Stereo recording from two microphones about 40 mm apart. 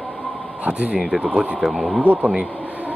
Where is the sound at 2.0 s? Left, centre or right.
Right.